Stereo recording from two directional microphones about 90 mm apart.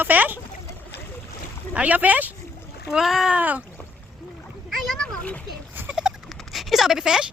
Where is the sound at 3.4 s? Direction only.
20° right (ahead or behind).